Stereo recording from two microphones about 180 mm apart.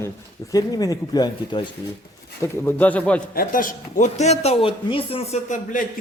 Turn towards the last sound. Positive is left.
turn(degrees=45)  # may be behind; listen again after turning